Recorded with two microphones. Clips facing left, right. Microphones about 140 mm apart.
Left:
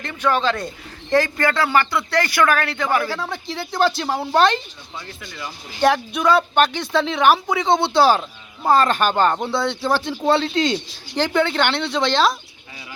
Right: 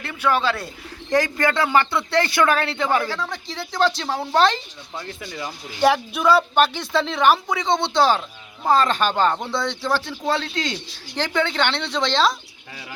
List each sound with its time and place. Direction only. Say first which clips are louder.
0.0 s speech: left 1 dB; 10° right (ahead or behind)
3.1 s speech: left 2 dB; 5° left (ahead or behind)
5.8 s speech: left 1 dB; 5° right (ahead or behind)
9.9 s speech: left 5 dB; 20° left (ahead or behind)
11.1 s speech: left 4 dB; 10° left (ahead or behind)